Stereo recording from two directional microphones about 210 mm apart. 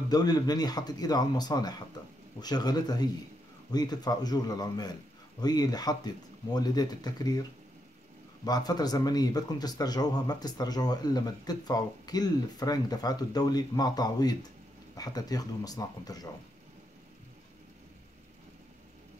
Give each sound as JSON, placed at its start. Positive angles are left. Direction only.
{"t": 0.1, "sound": "speech", "side_deg": 20}
{"t": 8.5, "sound": "speech", "side_deg": 20}